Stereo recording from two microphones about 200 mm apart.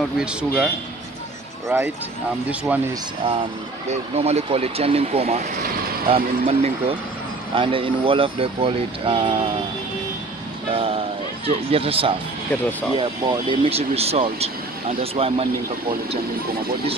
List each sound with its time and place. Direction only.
0.2 s a man's voice: 5° right (ahead or behind)
1.7 s speech: 10° right (ahead or behind)
3.9 s speech: 30° right (ahead or behind)
10.7 s speech: 30° right (ahead or behind)